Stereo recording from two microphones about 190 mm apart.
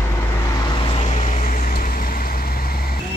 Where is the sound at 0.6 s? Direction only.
25° left (ahead or behind); by 2.8 s 50° left (ahead or behind).